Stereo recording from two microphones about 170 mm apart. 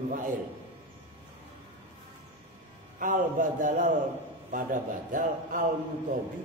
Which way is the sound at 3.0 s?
50° right (ahead or behind).